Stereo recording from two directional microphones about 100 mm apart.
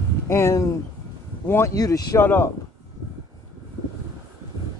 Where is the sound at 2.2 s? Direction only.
20° left (ahead or behind).